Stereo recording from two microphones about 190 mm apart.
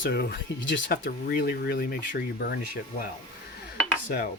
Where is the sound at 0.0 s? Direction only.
60° left (ahead or behind).